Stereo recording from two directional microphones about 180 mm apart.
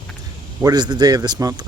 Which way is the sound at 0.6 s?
25° right (ahead or behind).